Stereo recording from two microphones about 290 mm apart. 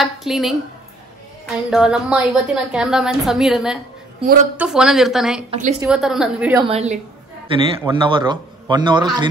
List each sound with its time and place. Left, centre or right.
0.0 s a woman's voice: centre
5.5 s a woman's voice: right
5.8 s a woman's voice: centre
6.6 s a woman's voice: right